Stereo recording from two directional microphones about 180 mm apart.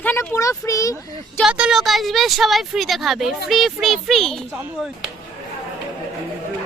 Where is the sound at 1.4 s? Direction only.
5° right (ahead or behind).